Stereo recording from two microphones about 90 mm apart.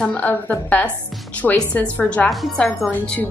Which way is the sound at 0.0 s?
15° left (ahead or behind).